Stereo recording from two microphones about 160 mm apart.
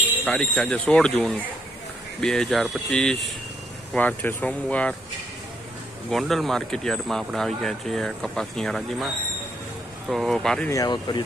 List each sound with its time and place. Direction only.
0.3 s speech: 5° left (ahead or behind)
6.1 s speech: centre (ahead or behind)
10.7 s speech: 25° left (ahead or behind)